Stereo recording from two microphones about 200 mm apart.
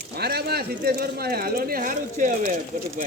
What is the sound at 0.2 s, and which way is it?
Speech, 50° right (ahead or behind).